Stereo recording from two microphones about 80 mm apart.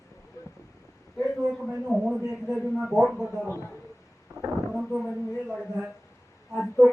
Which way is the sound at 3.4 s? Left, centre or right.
Left.